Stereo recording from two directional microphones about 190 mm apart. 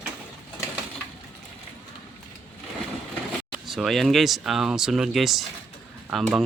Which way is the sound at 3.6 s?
Centre (ahead or behind).